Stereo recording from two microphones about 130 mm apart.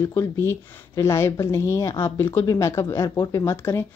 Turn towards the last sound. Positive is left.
turn(degrees=20)  # may be behind; listen again after turning